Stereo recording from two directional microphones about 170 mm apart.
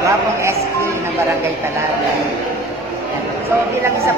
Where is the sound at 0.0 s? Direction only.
15° right (ahead or behind).